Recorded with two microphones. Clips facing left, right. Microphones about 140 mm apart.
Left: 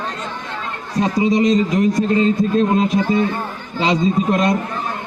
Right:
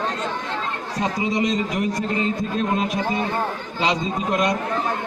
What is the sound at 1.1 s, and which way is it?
A man's voice, 25° left (ahead or behind).